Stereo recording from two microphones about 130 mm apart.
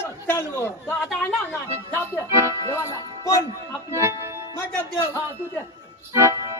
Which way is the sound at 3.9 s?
20° right (ahead or behind).